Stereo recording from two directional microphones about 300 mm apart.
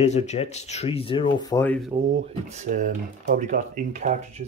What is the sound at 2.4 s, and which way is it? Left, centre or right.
Speech, right.